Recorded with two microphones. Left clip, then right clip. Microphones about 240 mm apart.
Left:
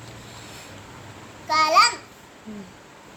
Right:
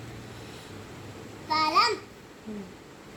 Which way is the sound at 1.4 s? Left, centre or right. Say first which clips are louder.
Left 6 dB; left.